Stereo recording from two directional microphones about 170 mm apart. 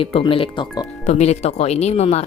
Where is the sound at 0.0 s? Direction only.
30° left (ahead or behind).